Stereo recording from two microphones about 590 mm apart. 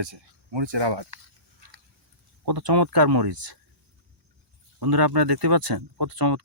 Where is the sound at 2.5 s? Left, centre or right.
Right.